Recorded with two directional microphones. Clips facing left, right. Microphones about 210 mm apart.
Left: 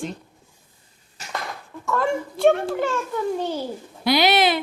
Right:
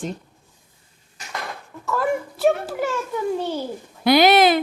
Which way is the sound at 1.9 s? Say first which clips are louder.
Even; 5° right (ahead or behind).